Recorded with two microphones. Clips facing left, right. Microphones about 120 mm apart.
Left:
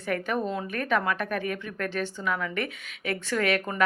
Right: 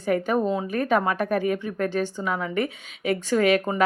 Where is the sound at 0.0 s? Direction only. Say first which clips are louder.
Right 6 dB; 30° right (ahead or behind).